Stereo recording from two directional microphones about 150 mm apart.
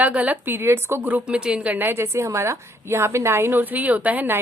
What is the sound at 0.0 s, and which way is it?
A woman's voice, 10° right (ahead or behind).